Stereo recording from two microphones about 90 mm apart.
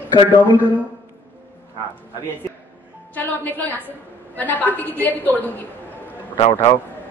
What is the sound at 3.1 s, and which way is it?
A woman's voice, 20° left (ahead or behind).